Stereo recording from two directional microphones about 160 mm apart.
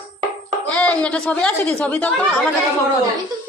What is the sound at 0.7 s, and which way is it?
A woman's voice, 10° left (ahead or behind).